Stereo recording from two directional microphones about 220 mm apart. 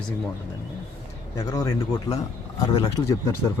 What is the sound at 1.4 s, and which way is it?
Speech, 15° left (ahead or behind).